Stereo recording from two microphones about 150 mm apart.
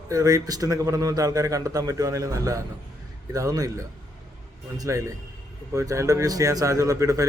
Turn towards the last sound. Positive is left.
turn(degrees=-20)  # may be behind; listen again after turning